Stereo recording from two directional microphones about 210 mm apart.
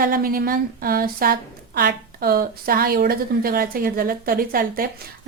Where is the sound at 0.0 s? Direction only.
40° right (ahead or behind).